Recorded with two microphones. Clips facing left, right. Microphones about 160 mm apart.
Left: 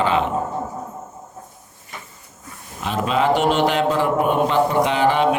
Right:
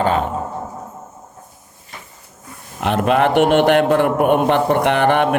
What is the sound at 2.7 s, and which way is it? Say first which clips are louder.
A man's voice: right 5 dB; 65° right (ahead or behind).